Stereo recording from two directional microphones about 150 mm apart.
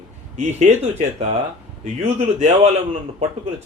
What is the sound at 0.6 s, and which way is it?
Speech, 50° right (ahead or behind).